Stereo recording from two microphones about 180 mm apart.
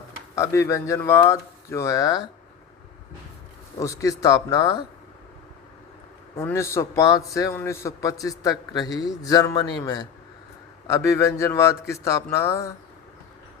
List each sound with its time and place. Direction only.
0.3 s speech: 15° left (ahead or behind)
3.8 s a man's voice: 20° left (ahead or behind)
6.3 s a man's voice: 15° left (ahead or behind)